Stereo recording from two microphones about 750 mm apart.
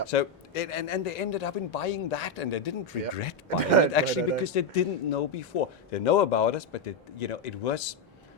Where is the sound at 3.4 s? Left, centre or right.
Right.